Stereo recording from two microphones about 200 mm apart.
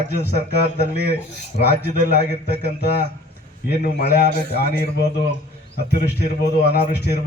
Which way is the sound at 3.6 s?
50° left (ahead or behind).